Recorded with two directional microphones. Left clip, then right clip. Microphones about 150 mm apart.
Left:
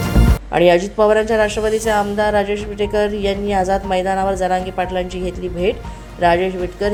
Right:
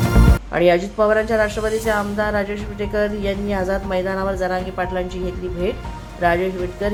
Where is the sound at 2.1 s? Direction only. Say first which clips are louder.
Left 5 dB; 15° left (ahead or behind).